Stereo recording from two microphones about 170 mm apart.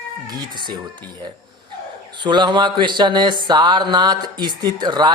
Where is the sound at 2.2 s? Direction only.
25° right (ahead or behind).